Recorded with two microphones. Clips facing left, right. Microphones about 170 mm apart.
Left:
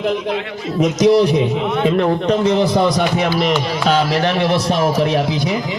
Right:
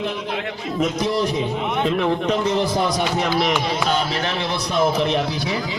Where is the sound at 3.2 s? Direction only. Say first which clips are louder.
Left 3 dB; centre (ahead or behind).